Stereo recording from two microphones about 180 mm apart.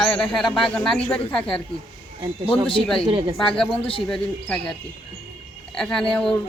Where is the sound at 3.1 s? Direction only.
30° right (ahead or behind).